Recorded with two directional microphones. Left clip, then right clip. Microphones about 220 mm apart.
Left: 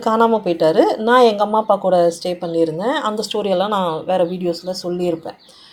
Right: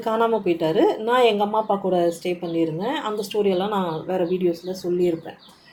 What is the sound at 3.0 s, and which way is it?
Speech, 35° left (ahead or behind).